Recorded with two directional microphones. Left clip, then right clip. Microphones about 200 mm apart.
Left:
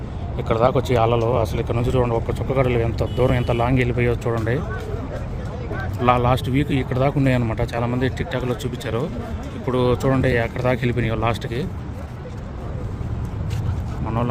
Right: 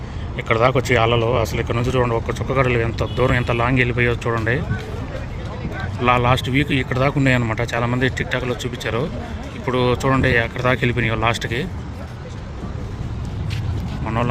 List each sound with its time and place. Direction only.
0.3 s speech: centre (ahead or behind)
6.0 s speech: 5° left (ahead or behind)